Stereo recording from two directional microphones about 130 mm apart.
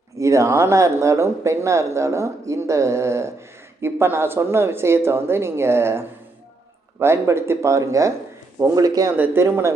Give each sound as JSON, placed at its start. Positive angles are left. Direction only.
{"t": 0.2, "sound": "speech", "side_deg": -25}
{"t": 9.1, "sound": "speech", "side_deg": -15}